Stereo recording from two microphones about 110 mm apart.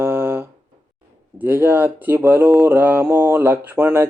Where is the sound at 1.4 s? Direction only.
20° right (ahead or behind).